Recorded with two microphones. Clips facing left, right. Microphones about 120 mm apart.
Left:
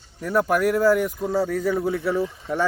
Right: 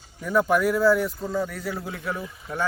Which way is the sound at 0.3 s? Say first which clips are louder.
Even; 5° left (ahead or behind).